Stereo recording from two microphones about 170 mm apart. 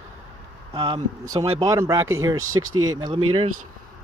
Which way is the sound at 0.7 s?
30° right (ahead or behind).